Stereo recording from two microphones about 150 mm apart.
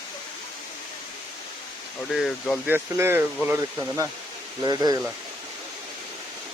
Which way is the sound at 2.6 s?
15° right (ahead or behind).